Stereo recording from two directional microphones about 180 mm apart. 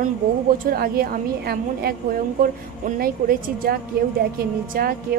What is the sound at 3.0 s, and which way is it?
A woman's voice, 55° right (ahead or behind).